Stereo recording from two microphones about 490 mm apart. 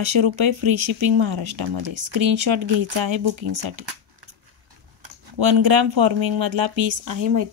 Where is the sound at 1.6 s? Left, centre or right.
Right.